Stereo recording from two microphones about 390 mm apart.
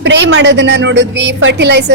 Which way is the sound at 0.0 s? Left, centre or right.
Right.